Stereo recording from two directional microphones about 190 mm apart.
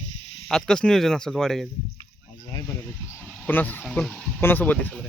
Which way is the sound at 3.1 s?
5° right (ahead or behind).